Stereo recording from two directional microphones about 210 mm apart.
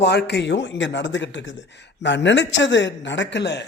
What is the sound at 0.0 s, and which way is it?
A man's voice, 55° left (ahead or behind).